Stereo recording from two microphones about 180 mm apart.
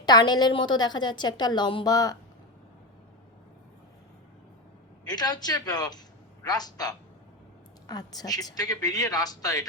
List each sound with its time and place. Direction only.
0.0 s a woman's voice: 25° left (ahead or behind)
5.0 s a woman's voice: 20° left (ahead or behind)